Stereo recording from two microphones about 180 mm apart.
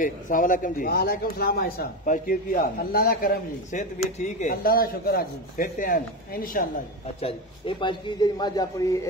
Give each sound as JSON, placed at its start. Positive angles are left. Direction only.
{"t": 0.0, "sound": "a man's voice", "side_deg": 50}
{"t": 4.0, "sound": "speech", "side_deg": 40}
{"t": 7.2, "sound": "a man's voice", "side_deg": 30}